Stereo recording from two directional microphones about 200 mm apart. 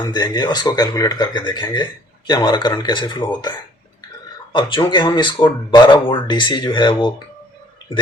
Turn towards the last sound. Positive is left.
turn(degrees=25)  # may be behind; listen again after turning